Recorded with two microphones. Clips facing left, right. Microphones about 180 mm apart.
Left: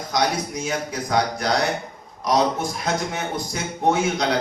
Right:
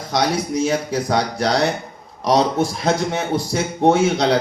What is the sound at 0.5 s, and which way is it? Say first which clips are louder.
A man's voice: right 7 dB; 30° right (ahead or behind).